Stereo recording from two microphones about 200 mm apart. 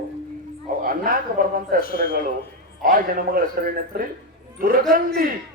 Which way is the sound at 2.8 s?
45° right (ahead or behind).